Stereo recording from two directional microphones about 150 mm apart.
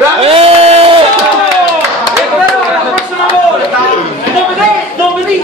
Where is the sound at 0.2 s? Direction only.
40° right (ahead or behind).